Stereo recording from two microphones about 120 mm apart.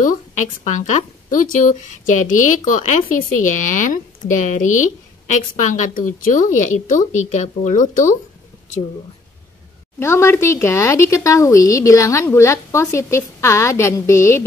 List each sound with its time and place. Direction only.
0.7 s a woman's voice: 90° left
9.9 s speech: 20° left (ahead or behind)